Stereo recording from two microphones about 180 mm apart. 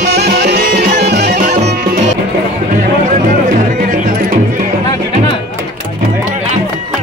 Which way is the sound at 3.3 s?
50° right (ahead or behind).